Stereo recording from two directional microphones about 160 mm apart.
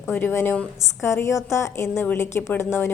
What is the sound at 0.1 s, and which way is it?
A woman's voice, 15° left (ahead or behind).